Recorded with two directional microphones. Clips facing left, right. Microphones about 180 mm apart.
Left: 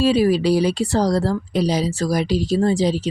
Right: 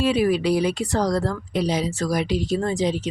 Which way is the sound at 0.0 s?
30° left (ahead or behind).